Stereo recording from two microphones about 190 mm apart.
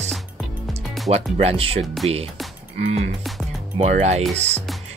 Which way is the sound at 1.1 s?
30° right (ahead or behind).